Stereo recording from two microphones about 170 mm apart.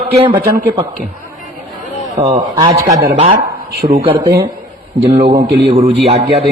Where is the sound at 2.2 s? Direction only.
40° right (ahead or behind).